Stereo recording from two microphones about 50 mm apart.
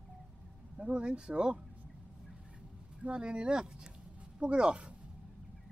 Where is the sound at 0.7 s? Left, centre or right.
Right.